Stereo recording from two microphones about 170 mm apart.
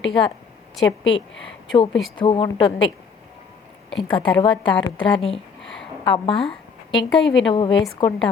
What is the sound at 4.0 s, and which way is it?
A woman's voice, 30° left (ahead or behind).